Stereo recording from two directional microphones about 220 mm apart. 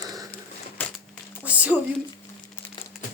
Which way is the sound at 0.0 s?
15° right (ahead or behind).